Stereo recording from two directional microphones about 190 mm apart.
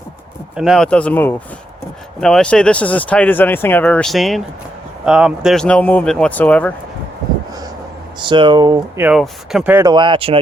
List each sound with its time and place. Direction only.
0.5 s speech: 5° right (ahead or behind)
8.2 s speech: 25° right (ahead or behind)
9.0 s speech: 10° right (ahead or behind)
9.7 s speech: 20° right (ahead or behind)